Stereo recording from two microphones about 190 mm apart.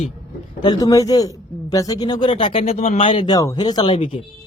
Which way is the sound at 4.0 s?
40° left (ahead or behind).